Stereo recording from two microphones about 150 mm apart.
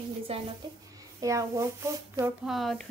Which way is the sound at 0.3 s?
40° right (ahead or behind).